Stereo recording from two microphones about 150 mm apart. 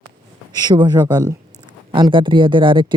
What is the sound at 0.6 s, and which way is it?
Speech, 30° right (ahead or behind).